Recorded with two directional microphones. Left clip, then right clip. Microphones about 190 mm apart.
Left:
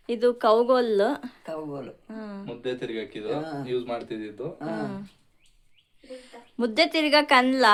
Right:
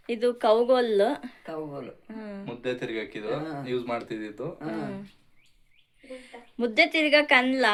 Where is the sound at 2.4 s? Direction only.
25° right (ahead or behind).